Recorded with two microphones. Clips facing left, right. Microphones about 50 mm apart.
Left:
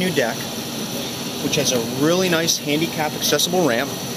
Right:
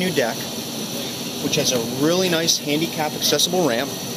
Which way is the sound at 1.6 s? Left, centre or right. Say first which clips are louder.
Left 1 dB; centre.